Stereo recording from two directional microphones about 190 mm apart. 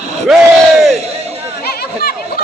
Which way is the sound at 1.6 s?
55° left (ahead or behind).